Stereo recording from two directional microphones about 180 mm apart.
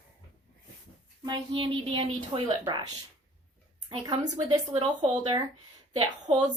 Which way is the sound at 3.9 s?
20° right (ahead or behind).